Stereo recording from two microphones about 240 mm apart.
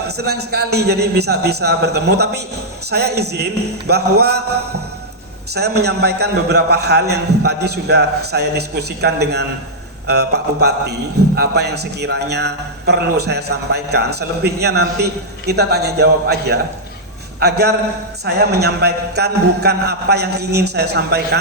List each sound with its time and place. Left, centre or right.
0.1 s a man's voice: right
5.5 s a man's voice: right